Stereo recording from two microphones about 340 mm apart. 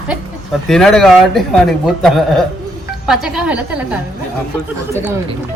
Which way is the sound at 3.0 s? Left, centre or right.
Centre.